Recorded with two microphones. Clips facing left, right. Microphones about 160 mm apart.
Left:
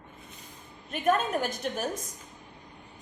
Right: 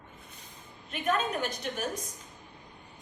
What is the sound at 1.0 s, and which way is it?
Speech, 45° left (ahead or behind).